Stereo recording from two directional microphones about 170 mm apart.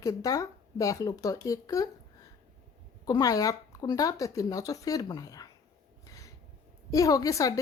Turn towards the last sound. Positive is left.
turn(degrees=20)  # may be behind; listen again after turning